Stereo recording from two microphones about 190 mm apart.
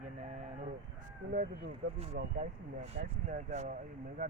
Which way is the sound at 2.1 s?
40° right (ahead or behind).